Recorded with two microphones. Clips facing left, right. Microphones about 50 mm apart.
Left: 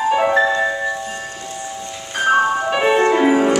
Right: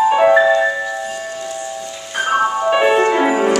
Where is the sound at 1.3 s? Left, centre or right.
Right.